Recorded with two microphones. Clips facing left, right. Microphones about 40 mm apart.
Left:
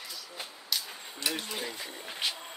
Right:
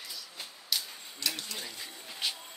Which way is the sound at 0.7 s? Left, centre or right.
Centre.